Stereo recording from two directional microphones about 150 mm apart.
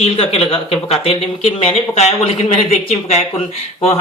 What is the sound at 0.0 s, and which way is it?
Speech, 40° left (ahead or behind).